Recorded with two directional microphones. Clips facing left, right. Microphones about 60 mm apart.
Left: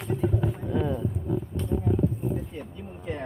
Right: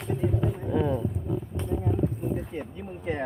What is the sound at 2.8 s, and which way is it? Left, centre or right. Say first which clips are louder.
Speech: right 3 dB; right.